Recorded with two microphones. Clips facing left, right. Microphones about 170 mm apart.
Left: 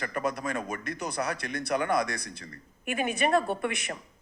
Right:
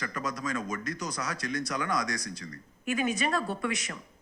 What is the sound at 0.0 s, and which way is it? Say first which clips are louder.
A man's voice: left 3 dB; 55° left (ahead or behind).